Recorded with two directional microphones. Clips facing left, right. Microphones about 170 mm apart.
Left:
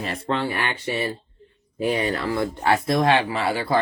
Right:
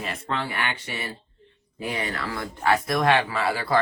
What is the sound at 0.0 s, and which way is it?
Speech, 30° left (ahead or behind).